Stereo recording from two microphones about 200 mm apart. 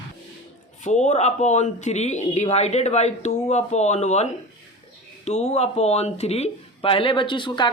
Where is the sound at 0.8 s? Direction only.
35° left (ahead or behind).